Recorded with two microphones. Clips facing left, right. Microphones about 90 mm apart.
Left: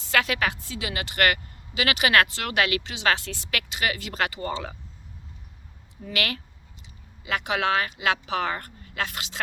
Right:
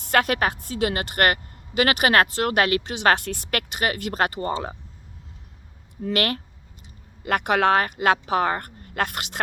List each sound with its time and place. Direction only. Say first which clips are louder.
0.0 s a woman's voice: right 4 dB; 50° right (ahead or behind)
6.0 s a woman's voice: right 6 dB; 45° right (ahead or behind)